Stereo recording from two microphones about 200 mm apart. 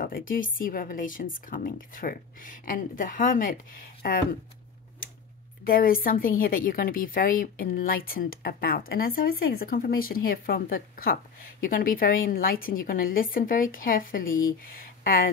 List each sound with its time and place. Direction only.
0.0 s a woman's voice: 45° left (ahead or behind)
5.7 s a woman's voice: 45° left (ahead or behind)